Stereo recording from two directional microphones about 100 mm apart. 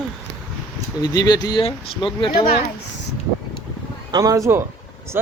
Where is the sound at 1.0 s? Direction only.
40° left (ahead or behind).